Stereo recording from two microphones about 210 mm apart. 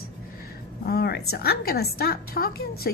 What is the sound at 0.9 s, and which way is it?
A woman's voice, 50° left (ahead or behind).